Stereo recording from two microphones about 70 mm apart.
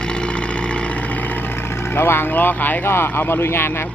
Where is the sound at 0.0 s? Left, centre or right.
Centre; by 3.8 s left.